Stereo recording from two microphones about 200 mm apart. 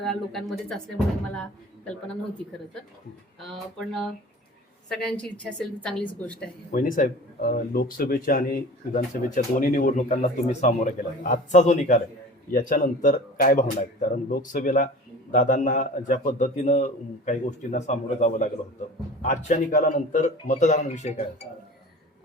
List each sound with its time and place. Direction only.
0.0 s speech: centre (ahead or behind)
4.9 s speech: 5° left (ahead or behind)
6.7 s a man's voice: 45° left (ahead or behind)